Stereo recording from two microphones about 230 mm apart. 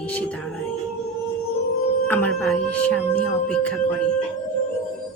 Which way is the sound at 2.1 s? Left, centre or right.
Centre.